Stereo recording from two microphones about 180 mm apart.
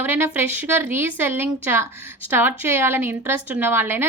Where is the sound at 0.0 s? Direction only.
10° right (ahead or behind).